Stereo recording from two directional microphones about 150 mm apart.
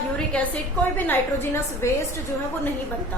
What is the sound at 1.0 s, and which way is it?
Speech, 15° left (ahead or behind).